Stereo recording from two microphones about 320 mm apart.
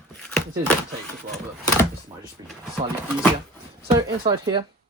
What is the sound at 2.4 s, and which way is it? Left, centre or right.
Speech, centre.